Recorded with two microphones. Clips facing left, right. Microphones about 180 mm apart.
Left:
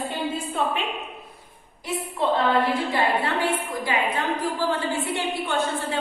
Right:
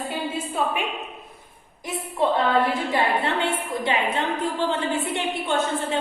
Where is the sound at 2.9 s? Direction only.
25° right (ahead or behind).